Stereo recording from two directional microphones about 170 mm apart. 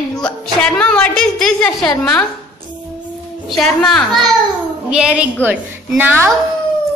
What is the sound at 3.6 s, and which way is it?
A woman's voice, 5° left (ahead or behind).